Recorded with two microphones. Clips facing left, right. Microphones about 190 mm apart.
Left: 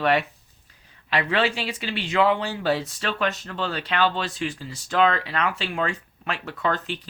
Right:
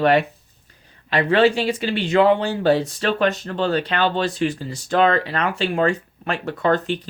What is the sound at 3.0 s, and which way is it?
Speech, 35° right (ahead or behind).